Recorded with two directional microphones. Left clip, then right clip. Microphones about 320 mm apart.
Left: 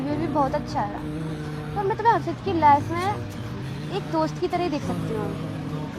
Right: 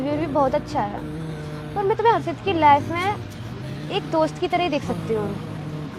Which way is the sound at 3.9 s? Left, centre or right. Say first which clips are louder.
Right 4 dB; right.